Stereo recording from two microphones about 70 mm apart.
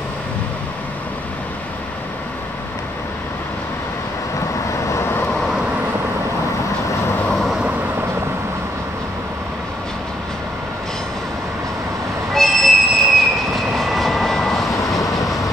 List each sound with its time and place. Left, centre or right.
4.8 s vehicle: left
12.4 s train: centre
13.7 s vehicle: centre
14.9 s train: centre